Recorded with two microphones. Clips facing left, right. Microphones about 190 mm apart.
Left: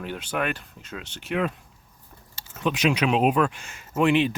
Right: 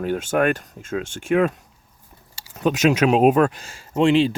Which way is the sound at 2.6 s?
45° right (ahead or behind).